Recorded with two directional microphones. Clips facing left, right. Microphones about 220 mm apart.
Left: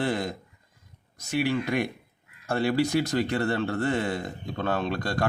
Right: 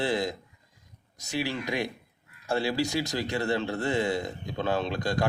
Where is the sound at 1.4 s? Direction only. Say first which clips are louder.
Left 4 dB; 55° left (ahead or behind).